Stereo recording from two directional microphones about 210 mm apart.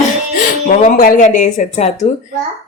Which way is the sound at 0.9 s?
40° left (ahead or behind).